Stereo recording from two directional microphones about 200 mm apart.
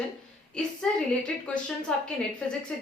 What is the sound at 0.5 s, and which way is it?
Speech, 5° left (ahead or behind).